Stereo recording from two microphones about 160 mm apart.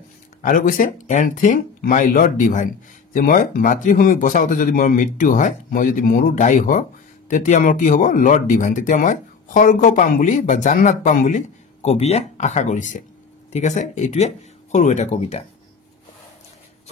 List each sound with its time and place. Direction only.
0.4 s speech: 60° left (ahead or behind); by 15.4 s 45° left (ahead or behind)